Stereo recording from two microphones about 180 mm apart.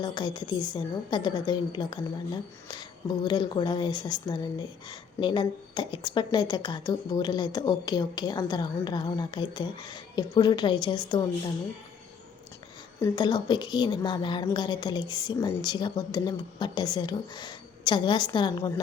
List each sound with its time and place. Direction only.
0.0 s a woman's voice: 25° left (ahead or behind)
13.0 s a woman's voice: 25° left (ahead or behind)